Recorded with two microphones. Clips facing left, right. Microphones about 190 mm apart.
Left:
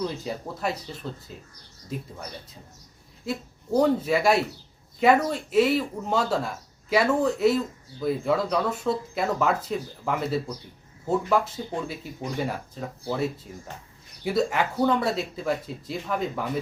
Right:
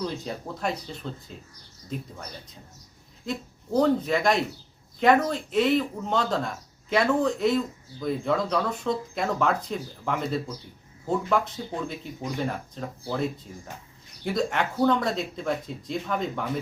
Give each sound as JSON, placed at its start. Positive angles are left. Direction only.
{"t": 0.3, "sound": "speech", "side_deg": 5}
{"t": 3.2, "sound": "speech", "side_deg": 5}